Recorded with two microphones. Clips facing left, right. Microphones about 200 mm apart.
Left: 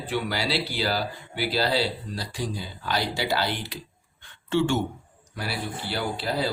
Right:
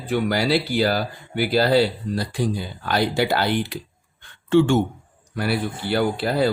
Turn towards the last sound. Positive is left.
turn(degrees=-55)  # may be behind; listen again after turning